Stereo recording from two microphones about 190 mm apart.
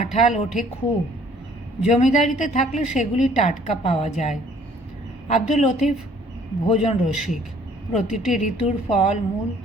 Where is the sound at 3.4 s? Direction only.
30° left (ahead or behind).